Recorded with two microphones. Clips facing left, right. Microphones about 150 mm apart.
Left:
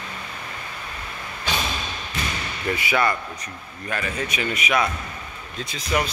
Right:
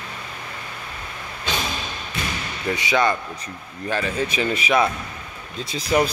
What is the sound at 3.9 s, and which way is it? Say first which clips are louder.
Speech: right 4 dB; 30° right (ahead or behind).